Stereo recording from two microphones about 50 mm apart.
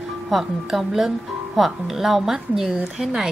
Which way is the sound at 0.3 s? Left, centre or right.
Centre.